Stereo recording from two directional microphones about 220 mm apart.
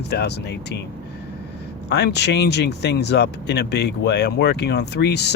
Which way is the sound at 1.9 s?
50° left (ahead or behind).